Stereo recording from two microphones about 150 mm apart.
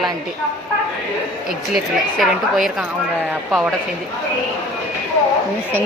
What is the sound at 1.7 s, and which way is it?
A woman's voice, centre (ahead or behind).